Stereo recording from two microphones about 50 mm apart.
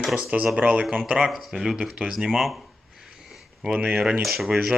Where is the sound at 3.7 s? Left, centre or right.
Right.